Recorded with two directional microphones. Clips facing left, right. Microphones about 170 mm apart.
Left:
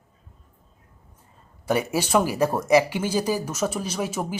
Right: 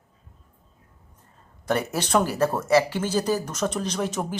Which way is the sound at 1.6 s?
10° left (ahead or behind).